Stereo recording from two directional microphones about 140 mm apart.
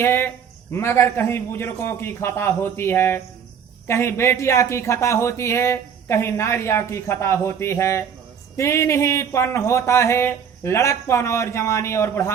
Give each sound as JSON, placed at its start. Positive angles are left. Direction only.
{"t": 0.0, "sound": "a man's voice", "side_deg": 15}